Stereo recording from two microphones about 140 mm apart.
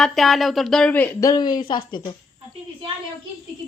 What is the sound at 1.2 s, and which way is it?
Speech, 30° left (ahead or behind).